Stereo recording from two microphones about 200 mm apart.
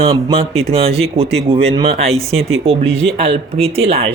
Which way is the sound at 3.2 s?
30° right (ahead or behind).